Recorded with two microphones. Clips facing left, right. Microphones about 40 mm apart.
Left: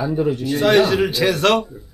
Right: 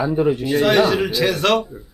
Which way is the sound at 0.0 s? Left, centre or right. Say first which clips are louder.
Right 2 dB; centre.